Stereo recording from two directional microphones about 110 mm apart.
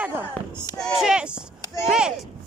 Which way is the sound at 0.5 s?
35° left (ahead or behind).